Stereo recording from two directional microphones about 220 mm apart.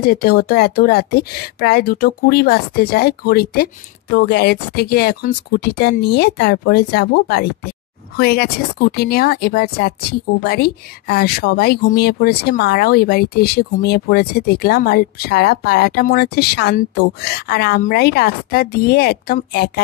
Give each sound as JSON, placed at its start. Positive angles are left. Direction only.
{"t": 0.0, "sound": "speech", "side_deg": 45}